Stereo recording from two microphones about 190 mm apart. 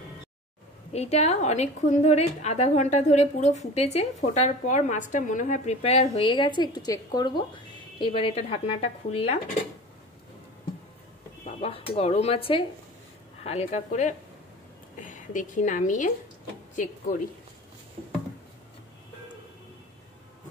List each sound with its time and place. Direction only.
0.9 s a woman's voice: 35° left (ahead or behind)
11.4 s a woman's voice: 30° left (ahead or behind)